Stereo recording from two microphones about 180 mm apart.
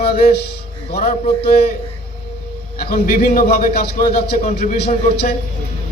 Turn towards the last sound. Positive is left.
turn(degrees=60)  # may be behind; listen again after turning